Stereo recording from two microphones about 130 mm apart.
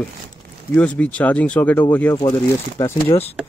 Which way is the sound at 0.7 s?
10° left (ahead or behind).